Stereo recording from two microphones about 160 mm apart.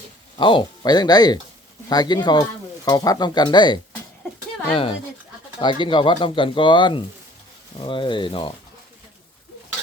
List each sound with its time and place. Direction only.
0.3 s speech: 30° left (ahead or behind)